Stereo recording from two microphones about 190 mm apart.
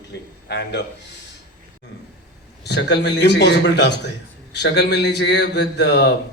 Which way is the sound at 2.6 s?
65° left (ahead or behind).